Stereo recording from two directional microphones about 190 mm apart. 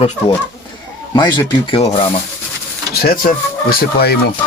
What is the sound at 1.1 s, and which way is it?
Speech, 25° left (ahead or behind).